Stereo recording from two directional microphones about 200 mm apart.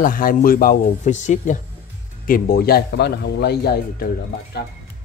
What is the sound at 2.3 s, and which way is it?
Speech, 50° left (ahead or behind).